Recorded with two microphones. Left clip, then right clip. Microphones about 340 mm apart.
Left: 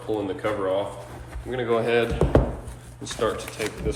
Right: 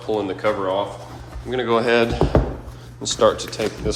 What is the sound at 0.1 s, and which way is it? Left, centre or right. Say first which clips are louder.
Speech: right 5 dB; centre.